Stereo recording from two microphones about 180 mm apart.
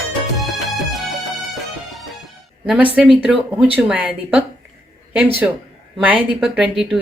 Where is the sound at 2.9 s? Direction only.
5° right (ahead or behind).